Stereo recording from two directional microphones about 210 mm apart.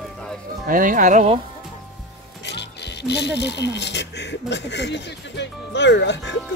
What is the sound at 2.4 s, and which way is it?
Speech, 55° left (ahead or behind).